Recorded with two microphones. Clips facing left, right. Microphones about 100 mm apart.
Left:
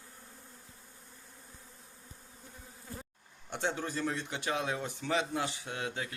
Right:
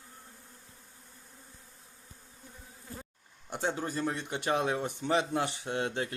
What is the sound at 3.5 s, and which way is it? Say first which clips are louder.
Bee: right 2 dB; 15° right (ahead or behind).